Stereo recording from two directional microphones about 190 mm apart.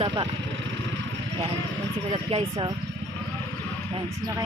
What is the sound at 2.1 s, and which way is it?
Speech, 30° right (ahead or behind).